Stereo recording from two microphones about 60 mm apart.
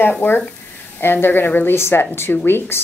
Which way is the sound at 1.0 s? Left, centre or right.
Left.